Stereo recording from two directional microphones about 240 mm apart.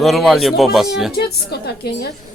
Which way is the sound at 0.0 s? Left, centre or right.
Centre.